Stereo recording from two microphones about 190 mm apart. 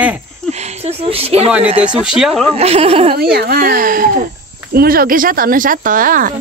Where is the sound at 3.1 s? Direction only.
55° right (ahead or behind).